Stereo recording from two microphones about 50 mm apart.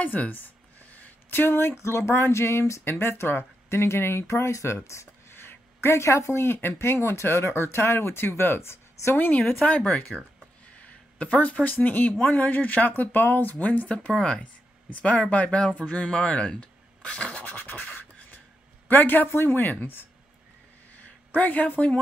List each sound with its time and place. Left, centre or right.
0.0 s a sound: left
1.5 s speech: left
1.8 s speech: left
2.8 s speech: left
5.4 s a sound: left
5.9 s speech: left
9.1 s speech: left
10.8 s speech: left
13.8 s speech: left
14.4 s speech: left
18.9 s speech: left
21.4 s speech: left